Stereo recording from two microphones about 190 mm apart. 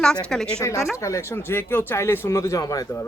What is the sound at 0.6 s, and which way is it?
Speech, 15° left (ahead or behind).